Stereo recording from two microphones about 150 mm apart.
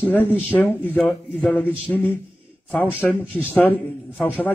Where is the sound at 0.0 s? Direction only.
10° left (ahead or behind).